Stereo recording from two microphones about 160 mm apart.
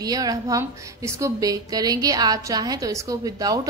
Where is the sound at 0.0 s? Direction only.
25° right (ahead or behind).